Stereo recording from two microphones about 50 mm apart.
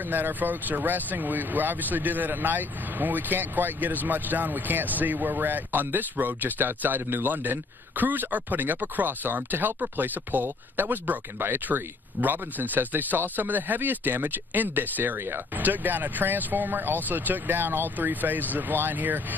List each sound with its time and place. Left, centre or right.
0.1 s speech: right
15.1 s speech: right
15.5 s speech: right